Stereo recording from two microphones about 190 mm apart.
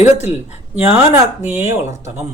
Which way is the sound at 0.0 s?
35° left (ahead or behind).